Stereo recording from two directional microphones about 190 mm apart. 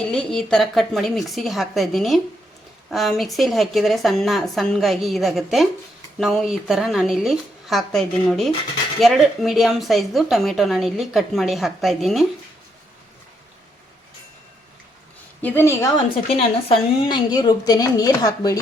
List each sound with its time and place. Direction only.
0.1 s a woman's voice: 5° left (ahead or behind)
15.4 s a woman's voice: 10° left (ahead or behind)
16.3 s speech: 25° left (ahead or behind)